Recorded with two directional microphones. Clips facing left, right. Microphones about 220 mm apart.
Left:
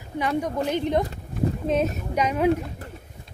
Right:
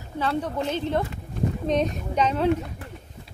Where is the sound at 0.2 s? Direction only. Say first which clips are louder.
Left 1 dB; 15° left (ahead or behind).